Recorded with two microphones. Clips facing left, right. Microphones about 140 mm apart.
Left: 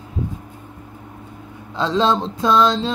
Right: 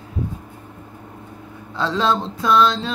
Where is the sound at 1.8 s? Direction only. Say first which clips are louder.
Left 2 dB; 20° left (ahead or behind).